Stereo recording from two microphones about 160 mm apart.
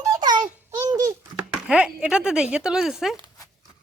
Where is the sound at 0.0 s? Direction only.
25° right (ahead or behind).